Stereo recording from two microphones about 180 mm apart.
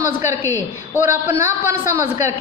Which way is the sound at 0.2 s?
15° right (ahead or behind).